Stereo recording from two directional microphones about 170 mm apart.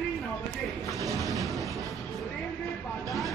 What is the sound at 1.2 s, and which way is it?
Train, centre (ahead or behind).